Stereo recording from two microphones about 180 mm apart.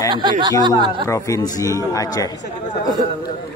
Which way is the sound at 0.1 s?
25° right (ahead or behind).